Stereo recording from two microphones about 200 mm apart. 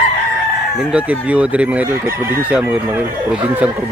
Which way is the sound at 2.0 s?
45° right (ahead or behind).